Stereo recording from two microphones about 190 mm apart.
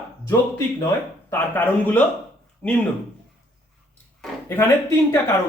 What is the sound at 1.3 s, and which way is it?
Speech, 10° left (ahead or behind).